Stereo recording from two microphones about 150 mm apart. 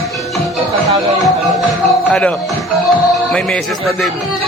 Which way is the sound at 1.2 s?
5° left (ahead or behind).